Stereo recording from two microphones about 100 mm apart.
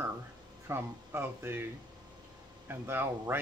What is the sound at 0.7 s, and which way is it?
Speech, 25° right (ahead or behind).